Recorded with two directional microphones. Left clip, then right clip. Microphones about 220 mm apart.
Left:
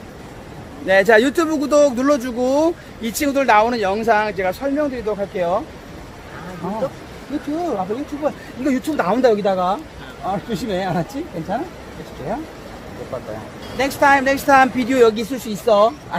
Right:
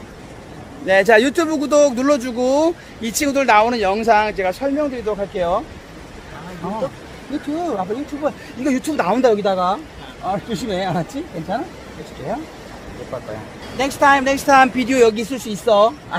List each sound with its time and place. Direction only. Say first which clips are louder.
0.9 s speech: even; 10° right (ahead or behind)
6.6 s speech: even; 15° right (ahead or behind)
13.7 s speech: even; 15° right (ahead or behind)